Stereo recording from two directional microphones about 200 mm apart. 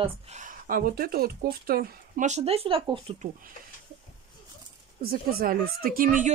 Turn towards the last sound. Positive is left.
turn(degrees=-40)  # may be behind; listen again after turning